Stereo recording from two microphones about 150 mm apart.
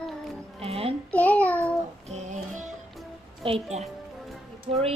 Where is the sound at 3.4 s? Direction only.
40° right (ahead or behind).